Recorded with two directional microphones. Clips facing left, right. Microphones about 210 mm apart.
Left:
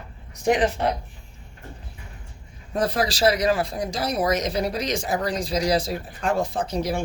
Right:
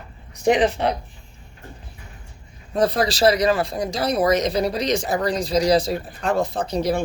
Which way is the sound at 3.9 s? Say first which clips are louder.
Right 4 dB; 35° right (ahead or behind).